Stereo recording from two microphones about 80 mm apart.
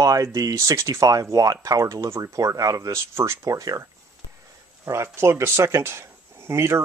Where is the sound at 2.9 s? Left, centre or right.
Right.